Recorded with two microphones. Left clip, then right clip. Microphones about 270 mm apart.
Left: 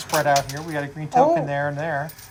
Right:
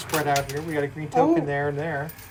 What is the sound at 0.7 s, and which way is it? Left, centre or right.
Speech, left.